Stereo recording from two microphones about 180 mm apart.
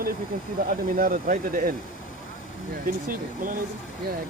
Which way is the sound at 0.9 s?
50° right (ahead or behind).